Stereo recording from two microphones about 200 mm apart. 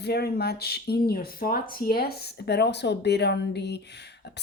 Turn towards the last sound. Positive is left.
turn(degrees=60)  # may be behind; listen again after turning